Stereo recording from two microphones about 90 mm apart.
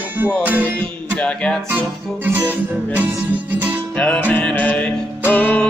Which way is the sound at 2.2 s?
20° right (ahead or behind).